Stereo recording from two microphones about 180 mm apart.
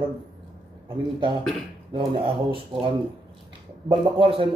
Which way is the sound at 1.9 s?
30° right (ahead or behind).